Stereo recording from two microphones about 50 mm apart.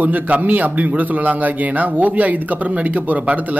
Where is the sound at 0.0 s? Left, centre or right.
Right.